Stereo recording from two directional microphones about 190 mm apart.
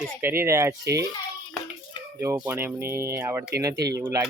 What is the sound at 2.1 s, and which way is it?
Speech, 15° right (ahead or behind).